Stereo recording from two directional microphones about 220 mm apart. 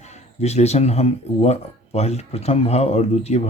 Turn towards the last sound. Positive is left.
turn(degrees=30)  # may be behind; listen again after turning